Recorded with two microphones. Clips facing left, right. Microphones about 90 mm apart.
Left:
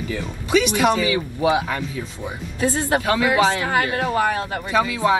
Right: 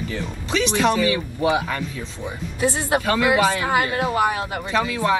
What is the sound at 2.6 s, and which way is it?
Speech, 20° right (ahead or behind).